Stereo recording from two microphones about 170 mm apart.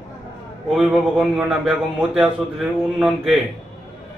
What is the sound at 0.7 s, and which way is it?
A man's voice, 5° right (ahead or behind).